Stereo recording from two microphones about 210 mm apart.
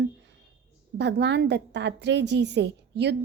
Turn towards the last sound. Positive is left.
turn(degrees=-55)  # may be behind; listen again after turning